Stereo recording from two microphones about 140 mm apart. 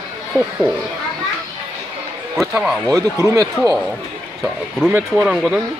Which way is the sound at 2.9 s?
20° right (ahead or behind).